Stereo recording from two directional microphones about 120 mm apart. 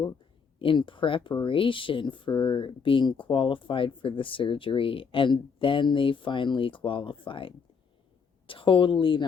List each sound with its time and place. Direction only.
0.6 s speech: 45° left (ahead or behind)